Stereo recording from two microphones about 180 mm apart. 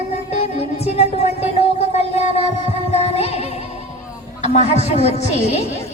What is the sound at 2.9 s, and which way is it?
Music, 35° left (ahead or behind).